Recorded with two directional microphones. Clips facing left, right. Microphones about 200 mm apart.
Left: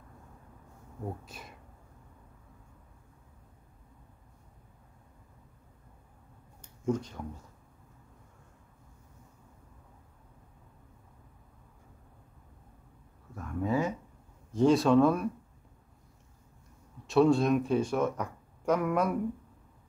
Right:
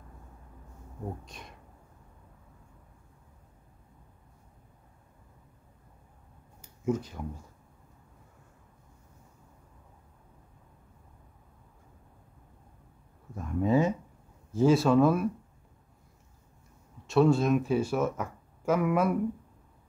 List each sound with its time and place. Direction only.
1.2 s speech: 5° left (ahead or behind)
6.6 s a sound: 5° right (ahead or behind)
13.3 s speech: 20° right (ahead or behind)
14.5 s speech: 5° right (ahead or behind)
17.0 s speech: centre (ahead or behind)